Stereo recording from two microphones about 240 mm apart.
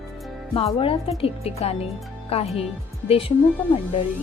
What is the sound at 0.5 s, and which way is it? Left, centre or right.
A woman's voice, left.